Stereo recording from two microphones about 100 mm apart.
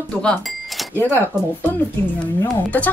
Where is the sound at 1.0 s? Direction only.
20° left (ahead or behind).